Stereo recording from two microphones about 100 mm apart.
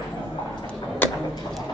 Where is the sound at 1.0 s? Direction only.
20° left (ahead or behind).